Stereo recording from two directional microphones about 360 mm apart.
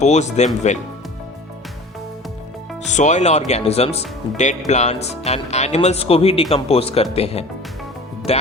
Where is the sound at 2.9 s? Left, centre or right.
Centre.